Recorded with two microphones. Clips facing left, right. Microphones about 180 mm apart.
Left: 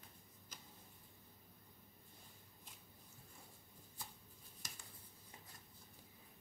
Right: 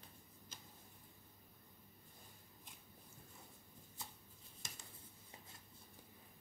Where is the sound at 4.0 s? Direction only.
20° right (ahead or behind).